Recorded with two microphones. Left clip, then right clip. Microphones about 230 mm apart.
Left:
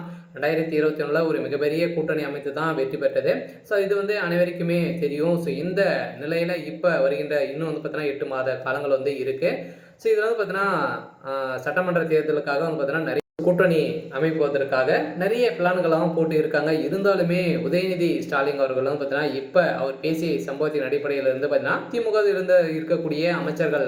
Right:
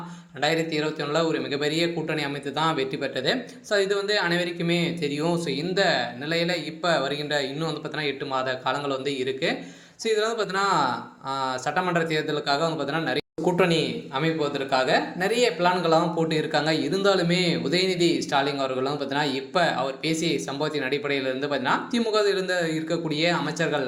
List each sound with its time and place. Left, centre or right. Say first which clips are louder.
0.4 s a man's voice: left 3 dB; right
20.6 s speech: left 3 dB; right